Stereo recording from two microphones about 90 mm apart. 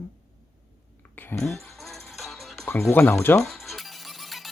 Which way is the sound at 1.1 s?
25° left (ahead or behind).